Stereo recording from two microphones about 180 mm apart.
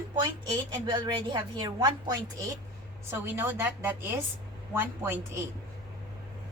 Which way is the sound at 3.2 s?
10° right (ahead or behind).